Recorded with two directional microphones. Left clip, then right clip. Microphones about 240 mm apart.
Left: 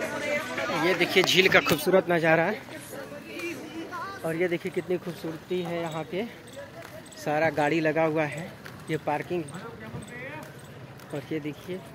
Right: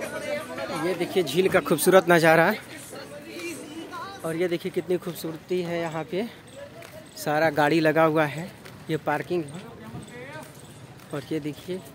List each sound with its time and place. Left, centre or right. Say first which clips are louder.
0.0 s music: left 2 dB; left
0.8 s speech: left 3 dB; centre
1.2 s speech: left 2 dB; right
4.0 s speech: right 1 dB; centre; by 9.4 s right
11.2 s speech: right 3 dB; right